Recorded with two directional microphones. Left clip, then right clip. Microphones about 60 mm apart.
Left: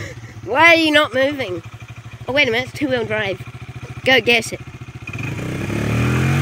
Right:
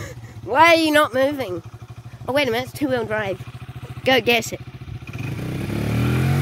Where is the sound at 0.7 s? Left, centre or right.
Right.